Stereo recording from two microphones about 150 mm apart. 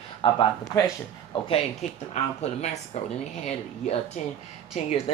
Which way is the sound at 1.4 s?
45° left (ahead or behind).